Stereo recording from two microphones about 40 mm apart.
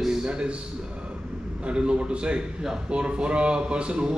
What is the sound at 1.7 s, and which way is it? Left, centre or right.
Speech, right.